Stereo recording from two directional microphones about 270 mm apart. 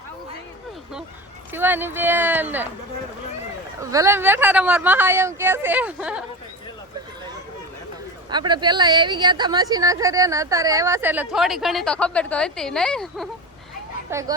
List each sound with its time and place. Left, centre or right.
1.5 s speech: centre
3.8 s speech: centre
8.3 s speech: centre
14.1 s speech: centre